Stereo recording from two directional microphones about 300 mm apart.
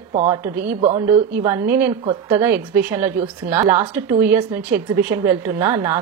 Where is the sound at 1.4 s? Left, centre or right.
Centre.